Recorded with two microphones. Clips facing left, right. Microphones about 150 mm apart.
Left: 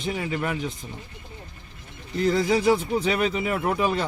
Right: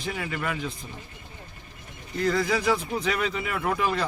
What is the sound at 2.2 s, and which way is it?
Speech, 25° left (ahead or behind).